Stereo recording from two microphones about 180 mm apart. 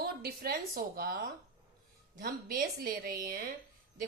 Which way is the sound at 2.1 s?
50° right (ahead or behind).